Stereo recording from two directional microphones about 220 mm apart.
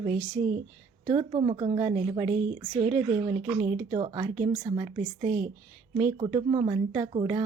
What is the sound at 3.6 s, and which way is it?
A woman's voice, 25° right (ahead or behind).